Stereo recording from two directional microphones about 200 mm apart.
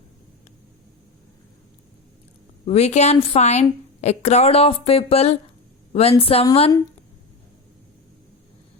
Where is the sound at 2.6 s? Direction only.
35° left (ahead or behind).